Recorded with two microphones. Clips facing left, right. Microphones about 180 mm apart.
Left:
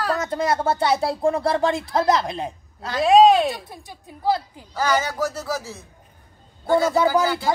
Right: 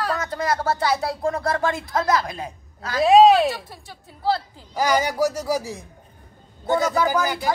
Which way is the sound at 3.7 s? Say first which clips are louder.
Left 3 dB; 20° left (ahead or behind).